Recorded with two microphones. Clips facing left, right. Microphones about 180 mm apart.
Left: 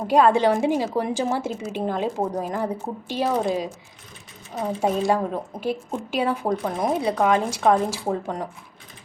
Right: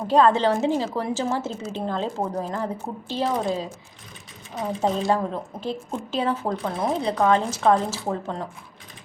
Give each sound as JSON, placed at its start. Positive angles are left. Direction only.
{"t": 0.1, "sound": "speech", "side_deg": 10}